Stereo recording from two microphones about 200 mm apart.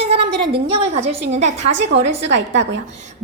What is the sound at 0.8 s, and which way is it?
A woman's voice, 30° right (ahead or behind).